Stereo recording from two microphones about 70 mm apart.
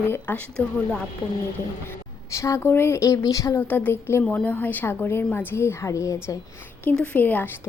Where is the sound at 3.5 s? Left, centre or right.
Left.